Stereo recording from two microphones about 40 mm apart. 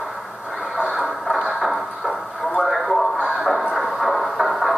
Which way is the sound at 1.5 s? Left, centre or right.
Centre.